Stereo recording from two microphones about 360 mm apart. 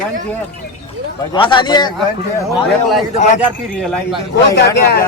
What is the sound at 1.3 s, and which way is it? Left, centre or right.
Speech, centre.